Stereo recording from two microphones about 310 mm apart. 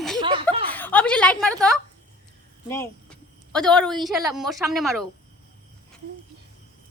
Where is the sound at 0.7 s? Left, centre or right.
Centre.